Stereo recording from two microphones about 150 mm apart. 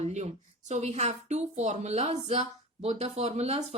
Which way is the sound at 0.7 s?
50° right (ahead or behind).